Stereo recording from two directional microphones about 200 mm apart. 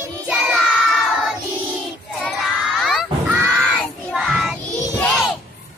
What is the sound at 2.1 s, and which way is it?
Crowd, centre (ahead or behind).